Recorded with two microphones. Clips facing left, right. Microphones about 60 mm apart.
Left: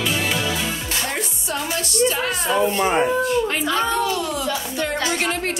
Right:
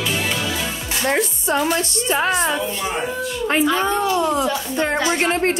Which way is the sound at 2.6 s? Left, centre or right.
Left.